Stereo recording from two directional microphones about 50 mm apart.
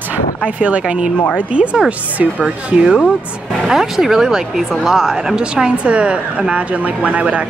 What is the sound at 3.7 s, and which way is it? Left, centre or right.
A woman's voice, centre.